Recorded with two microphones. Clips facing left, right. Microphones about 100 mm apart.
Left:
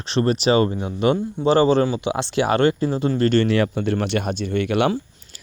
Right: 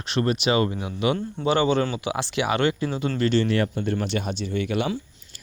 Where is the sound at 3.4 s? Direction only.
90° left.